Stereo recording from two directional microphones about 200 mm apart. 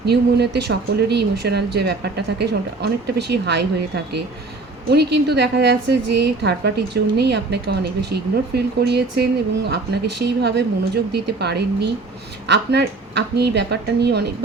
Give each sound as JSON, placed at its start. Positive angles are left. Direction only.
{"t": 0.0, "sound": "a woman's voice", "side_deg": -55}